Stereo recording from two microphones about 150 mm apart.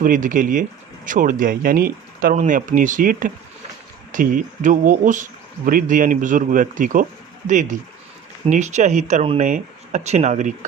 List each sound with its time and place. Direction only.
0.0 s speech: 60° right (ahead or behind)